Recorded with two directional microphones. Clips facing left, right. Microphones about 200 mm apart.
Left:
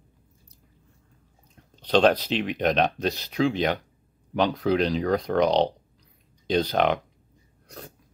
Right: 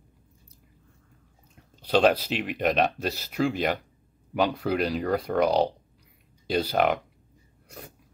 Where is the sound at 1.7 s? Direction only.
5° right (ahead or behind).